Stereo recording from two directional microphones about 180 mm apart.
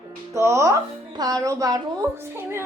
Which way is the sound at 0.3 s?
15° right (ahead or behind).